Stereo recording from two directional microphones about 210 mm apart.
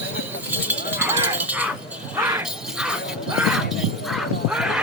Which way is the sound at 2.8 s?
5° right (ahead or behind).